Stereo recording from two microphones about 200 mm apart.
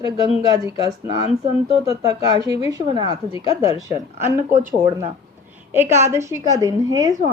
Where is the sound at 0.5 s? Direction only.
20° right (ahead or behind).